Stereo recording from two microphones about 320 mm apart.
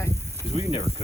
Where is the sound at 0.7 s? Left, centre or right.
Centre.